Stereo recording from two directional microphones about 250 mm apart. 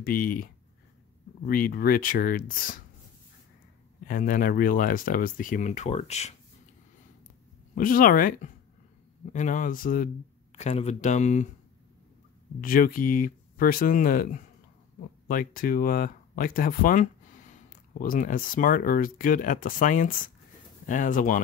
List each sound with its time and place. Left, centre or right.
0.0 s speech: left
1.5 s speech: left
4.1 s speech: left
7.7 s speech: left
12.5 s speech: left